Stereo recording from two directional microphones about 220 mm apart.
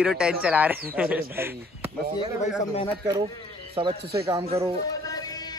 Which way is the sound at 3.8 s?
25° right (ahead or behind).